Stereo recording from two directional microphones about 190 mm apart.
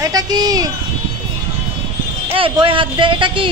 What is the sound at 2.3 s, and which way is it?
A man's voice, 25° right (ahead or behind).